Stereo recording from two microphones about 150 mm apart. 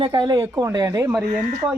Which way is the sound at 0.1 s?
25° right (ahead or behind).